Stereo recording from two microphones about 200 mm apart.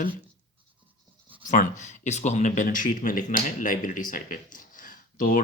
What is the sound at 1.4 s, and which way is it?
Speech, 40° left (ahead or behind).